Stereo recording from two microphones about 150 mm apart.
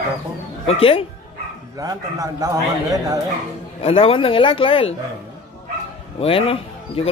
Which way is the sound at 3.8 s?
40° left (ahead or behind).